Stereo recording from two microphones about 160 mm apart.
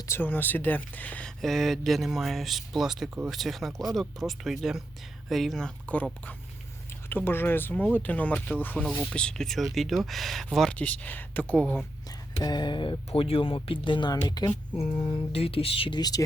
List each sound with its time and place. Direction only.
0.1 s speech: 10° left (ahead or behind)
7.1 s speech: 15° left (ahead or behind)
12.4 s speech: 25° left (ahead or behind)
14.3 s a sound: 25° left (ahead or behind)
15.3 s speech: 35° left (ahead or behind)